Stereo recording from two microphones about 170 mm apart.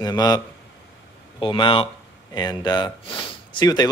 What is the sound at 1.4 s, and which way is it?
Speech, 30° left (ahead or behind).